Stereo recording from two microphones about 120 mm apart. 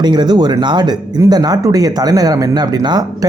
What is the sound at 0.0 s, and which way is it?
Speech, 35° right (ahead or behind).